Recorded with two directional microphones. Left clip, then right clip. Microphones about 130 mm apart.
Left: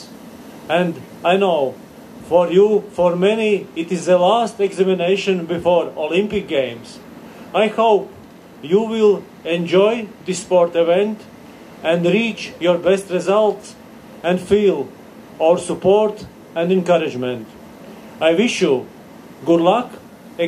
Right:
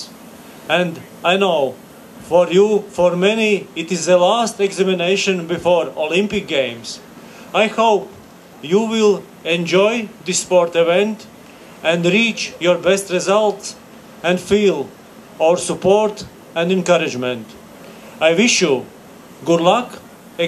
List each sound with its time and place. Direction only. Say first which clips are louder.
0.7 s a man's voice: right 1 dB; 55° right (ahead or behind)